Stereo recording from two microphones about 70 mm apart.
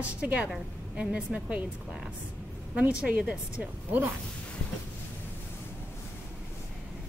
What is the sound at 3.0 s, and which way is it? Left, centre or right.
A woman's voice, centre.